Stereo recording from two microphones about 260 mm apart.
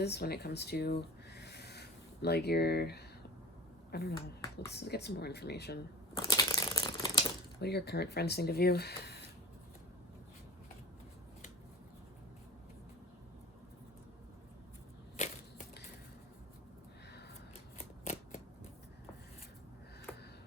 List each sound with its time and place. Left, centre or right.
0.0 s speech: left
6.1 s crumpling: centre
7.6 s speech: left
15.1 s a sound: left
17.7 s shuffling cards: left